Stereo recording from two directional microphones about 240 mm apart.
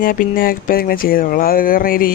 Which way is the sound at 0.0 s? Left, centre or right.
Left.